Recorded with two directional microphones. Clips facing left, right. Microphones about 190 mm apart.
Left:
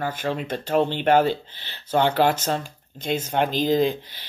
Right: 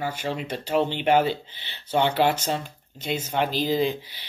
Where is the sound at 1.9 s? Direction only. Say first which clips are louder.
Left 2 dB; 45° left (ahead or behind).